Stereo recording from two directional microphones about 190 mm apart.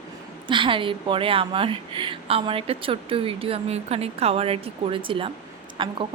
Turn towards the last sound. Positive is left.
turn(degrees=-25)  # may be behind; listen again after turning